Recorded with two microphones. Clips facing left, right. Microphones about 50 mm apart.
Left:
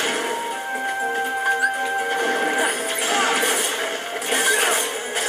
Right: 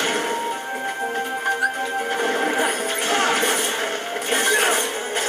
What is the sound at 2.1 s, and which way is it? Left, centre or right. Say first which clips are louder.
Smash: right 1 dB; centre.